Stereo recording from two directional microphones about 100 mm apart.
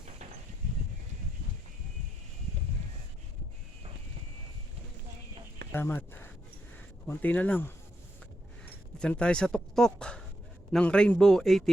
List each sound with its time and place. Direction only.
5.7 s speech: 20° left (ahead or behind)
9.0 s a man's voice: 10° left (ahead or behind)